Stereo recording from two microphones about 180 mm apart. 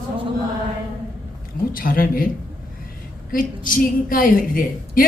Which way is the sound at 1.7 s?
50° left (ahead or behind).